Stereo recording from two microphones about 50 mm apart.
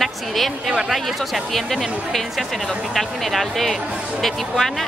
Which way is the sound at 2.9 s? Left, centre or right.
Centre.